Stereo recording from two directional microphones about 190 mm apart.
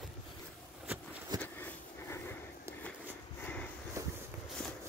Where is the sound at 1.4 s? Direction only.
10° left (ahead or behind).